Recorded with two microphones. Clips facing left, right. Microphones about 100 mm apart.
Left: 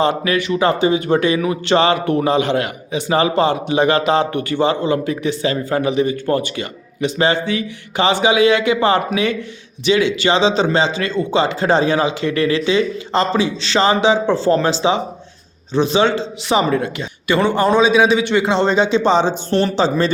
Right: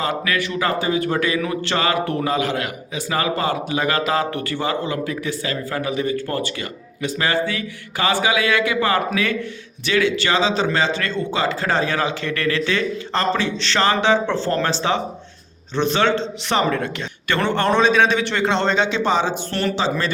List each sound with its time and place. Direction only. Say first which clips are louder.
0.0 s a man's voice: left 5 dB; 25° left (ahead or behind)
19.7 s speech: left 6 dB; 30° left (ahead or behind)